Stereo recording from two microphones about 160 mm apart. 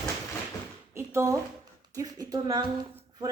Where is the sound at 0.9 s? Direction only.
20° right (ahead or behind).